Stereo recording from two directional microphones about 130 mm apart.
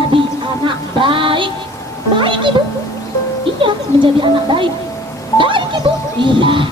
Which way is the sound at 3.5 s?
40° right (ahead or behind).